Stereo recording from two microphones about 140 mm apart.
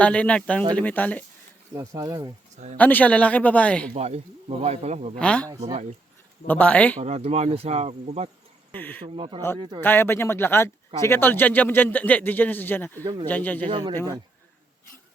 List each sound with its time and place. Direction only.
0.0 s speech: 10° left (ahead or behind)
1.7 s speech: 20° right (ahead or behind)
2.7 s speech: 10° left (ahead or behind)
3.9 s cricket: 50° right (ahead or behind)
5.2 s speech: 10° left (ahead or behind)
6.5 s speech: 10° left (ahead or behind)
7.0 s cricket: 50° right (ahead or behind)
8.7 s speech: 10° left (ahead or behind)
9.0 s speech: 40° right (ahead or behind)
9.8 s speech: 15° left (ahead or behind)
13.7 s speech: 35° right (ahead or behind)